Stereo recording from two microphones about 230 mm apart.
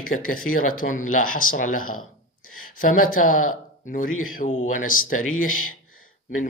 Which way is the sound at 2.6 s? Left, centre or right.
Left.